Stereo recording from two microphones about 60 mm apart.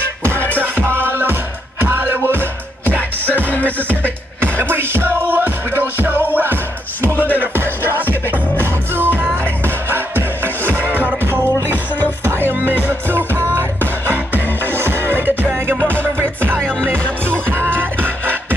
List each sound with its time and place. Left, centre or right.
0.2 s music: right
12.4 s music: right
17.3 s music: right